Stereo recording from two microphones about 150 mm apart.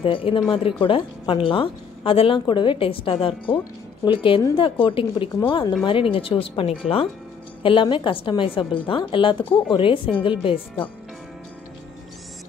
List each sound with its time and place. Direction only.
0.0 s a woman's voice: 40° left (ahead or behind)